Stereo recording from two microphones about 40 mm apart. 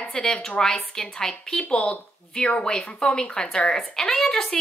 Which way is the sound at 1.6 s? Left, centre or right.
Left.